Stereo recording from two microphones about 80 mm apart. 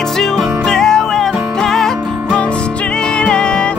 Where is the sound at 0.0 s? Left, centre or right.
Centre.